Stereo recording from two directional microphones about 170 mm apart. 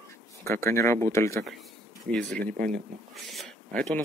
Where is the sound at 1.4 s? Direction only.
Centre (ahead or behind).